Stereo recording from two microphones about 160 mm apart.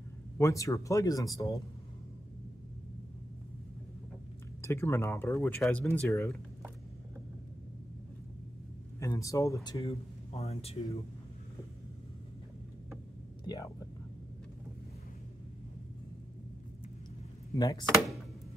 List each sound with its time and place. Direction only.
0.4 s speech: 20° left (ahead or behind)
4.6 s speech: 15° left (ahead or behind)
9.0 s speech: 20° left (ahead or behind)
9.8 s speech: 40° left (ahead or behind)
13.4 s speech: 25° left (ahead or behind)
17.6 s speech: 20° left (ahead or behind)